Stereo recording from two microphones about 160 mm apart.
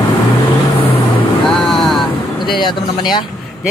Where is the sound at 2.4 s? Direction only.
30° left (ahead or behind).